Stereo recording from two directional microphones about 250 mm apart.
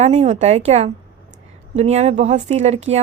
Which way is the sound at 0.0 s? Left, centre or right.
Right.